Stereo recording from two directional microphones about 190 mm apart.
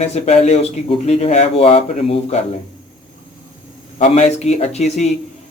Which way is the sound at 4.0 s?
35° left (ahead or behind).